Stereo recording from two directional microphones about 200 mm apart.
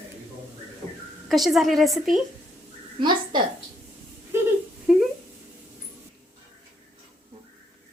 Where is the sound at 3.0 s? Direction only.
20° right (ahead or behind).